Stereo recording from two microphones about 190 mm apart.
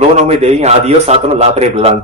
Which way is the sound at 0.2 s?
35° right (ahead or behind).